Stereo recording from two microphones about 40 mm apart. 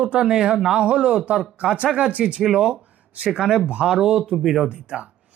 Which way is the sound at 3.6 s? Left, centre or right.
Right.